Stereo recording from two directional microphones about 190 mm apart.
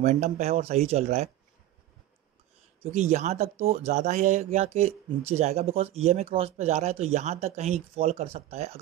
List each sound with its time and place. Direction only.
0.0 s speech: 35° right (ahead or behind)
2.8 s speech: 35° right (ahead or behind)